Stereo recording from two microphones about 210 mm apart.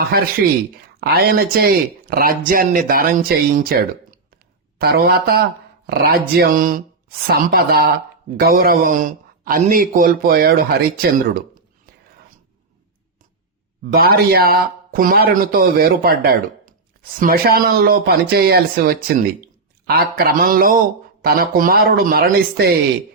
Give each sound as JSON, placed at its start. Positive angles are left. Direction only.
{"t": 0.4, "sound": "a man's voice", "side_deg": -45}
{"t": 13.9, "sound": "a man's voice", "side_deg": -45}